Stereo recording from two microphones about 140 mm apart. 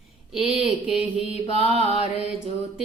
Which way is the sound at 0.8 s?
45° left (ahead or behind).